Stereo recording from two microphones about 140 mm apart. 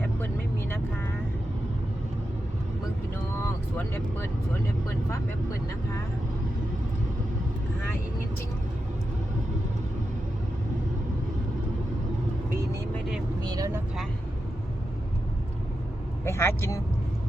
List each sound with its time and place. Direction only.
3.3 s vehicle: 15° left (ahead or behind)
13.4 s speech: 25° right (ahead or behind)
16.2 s speech: 20° left (ahead or behind)